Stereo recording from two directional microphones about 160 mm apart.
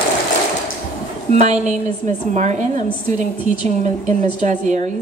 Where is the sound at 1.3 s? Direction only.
45° right (ahead or behind).